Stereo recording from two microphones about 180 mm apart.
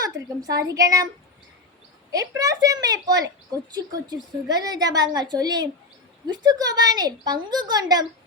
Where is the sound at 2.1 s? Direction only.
20° right (ahead or behind).